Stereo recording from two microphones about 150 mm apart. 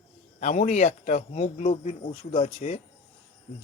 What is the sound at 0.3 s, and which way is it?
Speech, 55° left (ahead or behind).